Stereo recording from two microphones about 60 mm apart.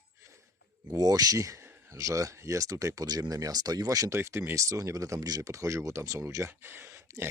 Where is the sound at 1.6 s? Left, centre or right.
Right.